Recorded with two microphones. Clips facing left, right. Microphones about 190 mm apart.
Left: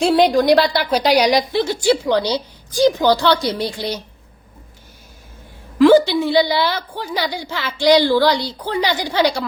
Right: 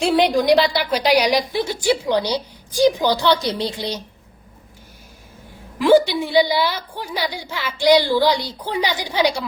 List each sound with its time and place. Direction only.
0.2 s a woman's voice: 10° right (ahead or behind)
5.8 s a woman's voice: 10° right (ahead or behind)